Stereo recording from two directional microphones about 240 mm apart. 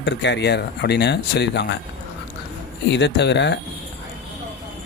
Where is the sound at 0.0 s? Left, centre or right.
Left.